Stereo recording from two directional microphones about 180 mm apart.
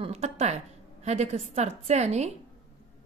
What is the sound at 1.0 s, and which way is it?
A woman's voice, 35° right (ahead or behind).